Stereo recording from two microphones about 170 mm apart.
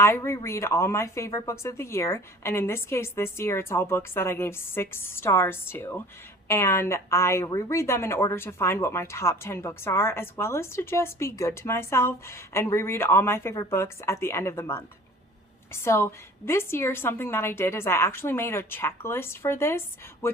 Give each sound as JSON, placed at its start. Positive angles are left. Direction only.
{"t": 0.0, "sound": "speech", "side_deg": 15}